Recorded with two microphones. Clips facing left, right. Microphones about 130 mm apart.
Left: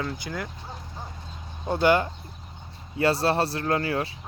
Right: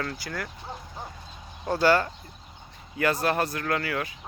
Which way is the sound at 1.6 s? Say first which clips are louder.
Left 1 dB; 20° left (ahead or behind).